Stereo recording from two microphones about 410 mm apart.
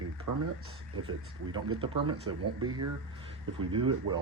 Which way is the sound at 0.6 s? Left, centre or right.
Right.